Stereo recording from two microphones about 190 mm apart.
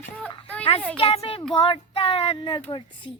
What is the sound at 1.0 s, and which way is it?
Speech, 30° left (ahead or behind).